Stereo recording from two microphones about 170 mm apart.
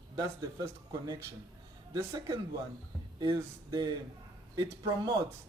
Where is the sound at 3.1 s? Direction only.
25° right (ahead or behind).